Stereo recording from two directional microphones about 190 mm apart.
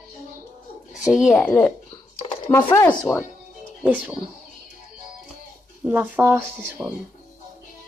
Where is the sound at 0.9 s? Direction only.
5° right (ahead or behind); by 2.9 s 15° left (ahead or behind).